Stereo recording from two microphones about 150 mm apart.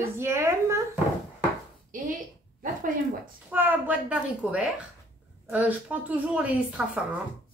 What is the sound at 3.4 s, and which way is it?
A woman's voice, 10° right (ahead or behind).